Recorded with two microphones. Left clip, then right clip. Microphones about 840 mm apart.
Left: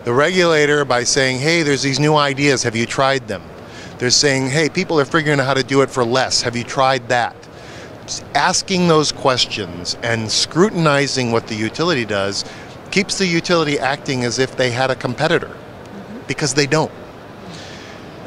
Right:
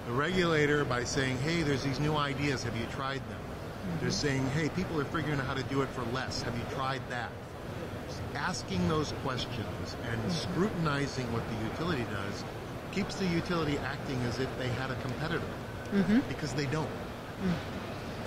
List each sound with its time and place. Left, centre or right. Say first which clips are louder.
0.2 s speech: left 14 dB; left